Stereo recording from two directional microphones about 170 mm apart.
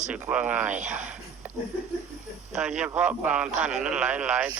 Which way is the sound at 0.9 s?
10° right (ahead or behind).